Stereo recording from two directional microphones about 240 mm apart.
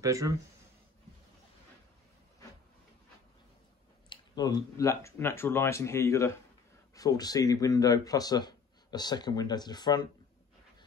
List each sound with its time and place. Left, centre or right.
0.0 s speech: centre
4.1 s a man's voice: centre